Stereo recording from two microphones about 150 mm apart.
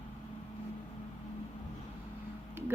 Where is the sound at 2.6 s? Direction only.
15° right (ahead or behind).